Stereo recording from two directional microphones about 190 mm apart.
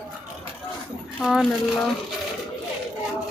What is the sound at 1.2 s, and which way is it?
Speech, centre (ahead or behind).